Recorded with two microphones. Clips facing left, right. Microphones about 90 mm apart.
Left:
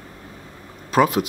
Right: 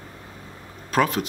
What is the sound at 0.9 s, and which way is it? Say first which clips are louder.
Speech: left 4 dB; 10° left (ahead or behind).